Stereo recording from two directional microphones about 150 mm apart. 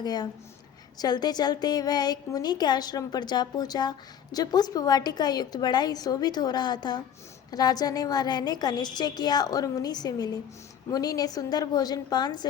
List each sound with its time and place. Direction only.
0.0 s a woman's voice: 25° left (ahead or behind)